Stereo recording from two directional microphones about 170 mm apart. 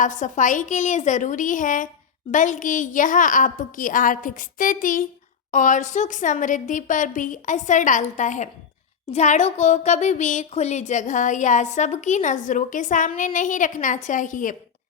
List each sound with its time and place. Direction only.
0.0 s speech: 50° left (ahead or behind)